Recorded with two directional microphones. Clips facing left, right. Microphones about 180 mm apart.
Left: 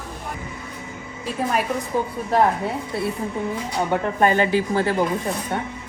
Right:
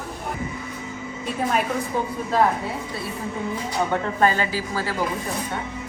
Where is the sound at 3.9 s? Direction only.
20° left (ahead or behind).